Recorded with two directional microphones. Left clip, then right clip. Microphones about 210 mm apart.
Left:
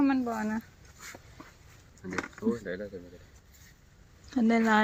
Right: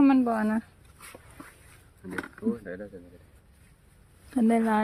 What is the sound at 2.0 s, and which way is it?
Speech, 30° left (ahead or behind).